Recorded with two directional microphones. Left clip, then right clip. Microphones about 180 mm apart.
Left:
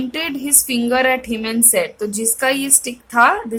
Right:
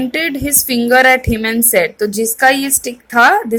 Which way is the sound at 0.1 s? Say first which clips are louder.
Right 5 dB; 20° right (ahead or behind).